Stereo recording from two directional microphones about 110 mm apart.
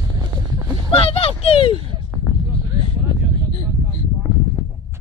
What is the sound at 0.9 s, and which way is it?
Speech, 60° left (ahead or behind).